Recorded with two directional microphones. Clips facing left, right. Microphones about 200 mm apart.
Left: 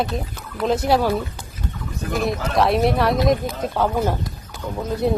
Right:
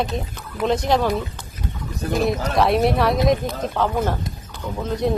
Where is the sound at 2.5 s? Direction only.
Centre (ahead or behind).